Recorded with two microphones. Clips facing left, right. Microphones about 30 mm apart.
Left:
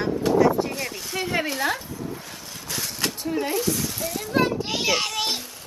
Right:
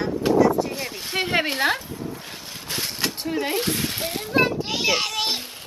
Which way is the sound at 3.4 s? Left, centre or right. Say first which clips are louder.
Right 1 dB; right.